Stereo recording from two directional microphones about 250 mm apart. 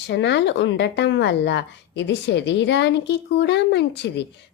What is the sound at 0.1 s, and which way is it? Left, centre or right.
A woman's voice, left.